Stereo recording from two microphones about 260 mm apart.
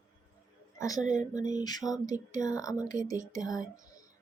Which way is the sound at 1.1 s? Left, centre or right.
Centre.